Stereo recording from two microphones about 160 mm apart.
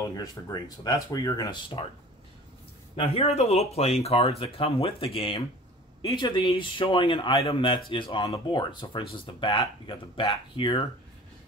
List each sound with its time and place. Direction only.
0.1 s speech: 25° left (ahead or behind)
3.0 s speech: 40° left (ahead or behind)